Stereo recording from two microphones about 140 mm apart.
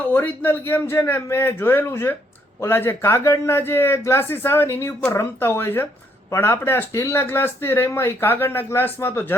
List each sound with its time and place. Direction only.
0.0 s speech: 15° left (ahead or behind)